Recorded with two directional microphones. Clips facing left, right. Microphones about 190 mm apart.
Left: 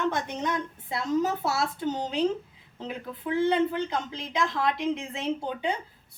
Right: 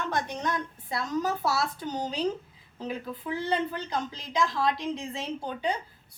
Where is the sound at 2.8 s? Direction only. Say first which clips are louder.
Even; 20° left (ahead or behind).